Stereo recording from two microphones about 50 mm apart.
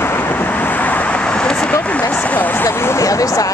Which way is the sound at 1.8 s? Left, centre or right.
Left.